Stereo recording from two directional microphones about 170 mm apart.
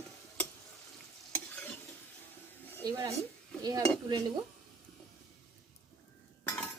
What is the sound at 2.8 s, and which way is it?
Speech, 20° right (ahead or behind).